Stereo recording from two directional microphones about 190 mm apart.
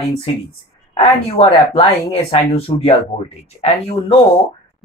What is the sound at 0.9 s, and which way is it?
Speech, 30° left (ahead or behind).